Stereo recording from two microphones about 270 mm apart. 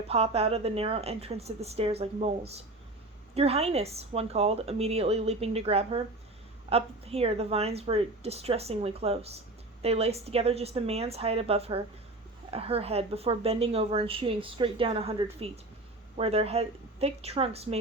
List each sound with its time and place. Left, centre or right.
0.1 s a woman's voice: right